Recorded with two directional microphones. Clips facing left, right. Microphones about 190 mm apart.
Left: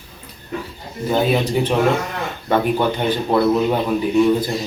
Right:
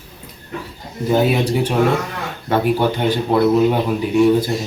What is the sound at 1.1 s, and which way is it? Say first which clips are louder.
A man's voice: right 2 dB; 10° right (ahead or behind).